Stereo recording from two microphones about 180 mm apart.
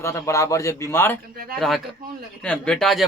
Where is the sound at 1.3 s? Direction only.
55° right (ahead or behind).